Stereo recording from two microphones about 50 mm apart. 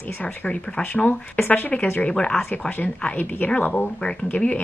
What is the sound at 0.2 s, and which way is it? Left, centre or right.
Speech, left.